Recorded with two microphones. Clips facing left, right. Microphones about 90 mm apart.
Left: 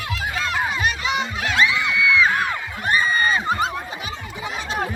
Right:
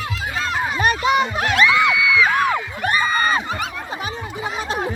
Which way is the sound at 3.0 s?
50° right (ahead or behind).